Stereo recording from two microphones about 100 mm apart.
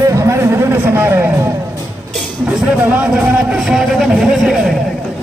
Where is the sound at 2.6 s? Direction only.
15° right (ahead or behind).